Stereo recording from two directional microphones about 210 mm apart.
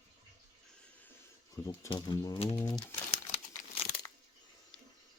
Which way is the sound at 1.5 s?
15° left (ahead or behind).